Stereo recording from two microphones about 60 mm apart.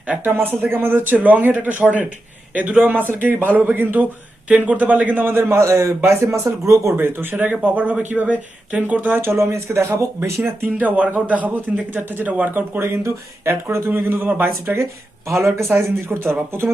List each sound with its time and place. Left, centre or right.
0.3 s speech: right
6.9 s speech: right
7.6 s speech: right
9.3 s speech: right
10.8 s speech: right
13.4 s speech: right
15.3 s speech: right